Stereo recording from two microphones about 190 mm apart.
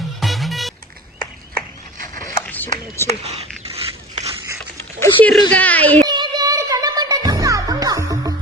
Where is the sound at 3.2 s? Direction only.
30° right (ahead or behind).